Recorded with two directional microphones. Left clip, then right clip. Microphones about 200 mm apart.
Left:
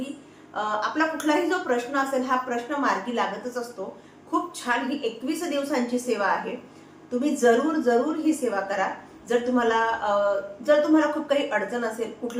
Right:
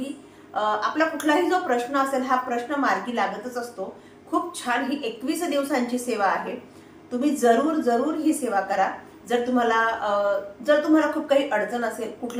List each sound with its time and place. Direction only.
0.5 s a woman's voice: 5° right (ahead or behind)